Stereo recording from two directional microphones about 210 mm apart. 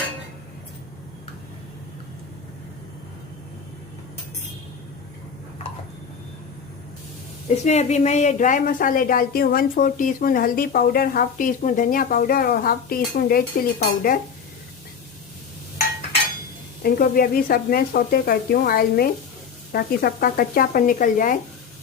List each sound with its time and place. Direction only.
7.5 s a woman's voice: 30° left (ahead or behind)
16.8 s speech: 45° left (ahead or behind)